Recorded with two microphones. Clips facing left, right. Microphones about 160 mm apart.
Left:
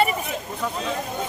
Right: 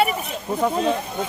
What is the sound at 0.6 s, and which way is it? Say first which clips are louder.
Speech: right 9 dB; 50° right (ahead or behind).